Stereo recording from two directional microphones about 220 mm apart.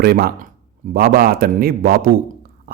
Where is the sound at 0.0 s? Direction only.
45° right (ahead or behind).